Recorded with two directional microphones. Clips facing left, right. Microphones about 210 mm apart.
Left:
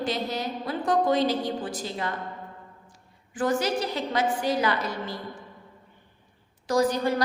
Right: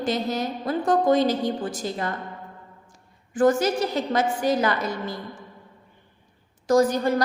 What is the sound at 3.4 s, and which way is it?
A woman's voice, 45° right (ahead or behind).